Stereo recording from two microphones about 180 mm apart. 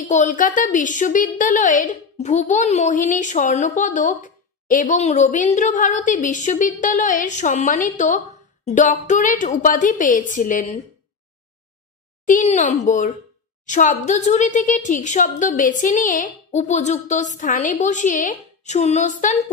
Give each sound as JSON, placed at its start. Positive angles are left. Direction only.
{"t": 0.0, "sound": "a woman's voice", "side_deg": 45}
{"t": 8.6, "sound": "music", "side_deg": 45}
{"t": 9.0, "sound": "a woman's voice", "side_deg": 45}
{"t": 12.3, "sound": "a woman's voice", "side_deg": 45}